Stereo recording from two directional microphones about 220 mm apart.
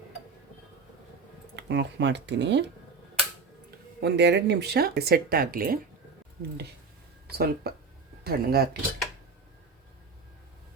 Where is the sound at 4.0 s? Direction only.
50° right (ahead or behind).